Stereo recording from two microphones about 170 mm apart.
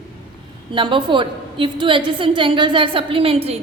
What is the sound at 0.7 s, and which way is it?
A woman's voice, 30° right (ahead or behind).